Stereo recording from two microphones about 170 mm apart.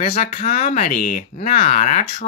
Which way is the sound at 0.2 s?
40° left (ahead or behind).